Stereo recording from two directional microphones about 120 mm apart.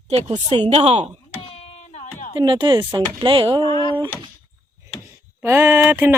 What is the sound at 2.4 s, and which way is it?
Speech, 40° right (ahead or behind).